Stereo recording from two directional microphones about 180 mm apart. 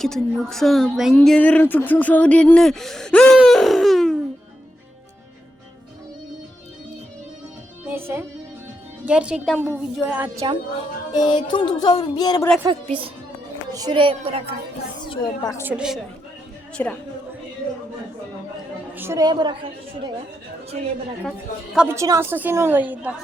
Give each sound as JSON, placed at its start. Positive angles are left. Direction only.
{"t": 0.0, "sound": "a woman's voice", "side_deg": 0}
{"t": 7.9, "sound": "music", "side_deg": -10}
{"t": 9.0, "sound": "a woman's voice", "side_deg": -5}
{"t": 11.1, "sound": "music", "side_deg": 25}
{"t": 13.7, "sound": "a woman's voice", "side_deg": -25}
{"t": 15.0, "sound": "speech", "side_deg": 25}
{"t": 15.6, "sound": "a woman's voice", "side_deg": -5}
{"t": 16.7, "sound": "a woman's voice", "side_deg": 5}
{"t": 18.9, "sound": "a woman's voice", "side_deg": -15}
{"t": 21.8, "sound": "a woman's voice", "side_deg": -15}